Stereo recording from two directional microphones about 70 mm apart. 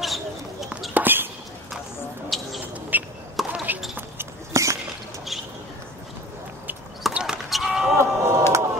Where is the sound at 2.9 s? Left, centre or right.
Right.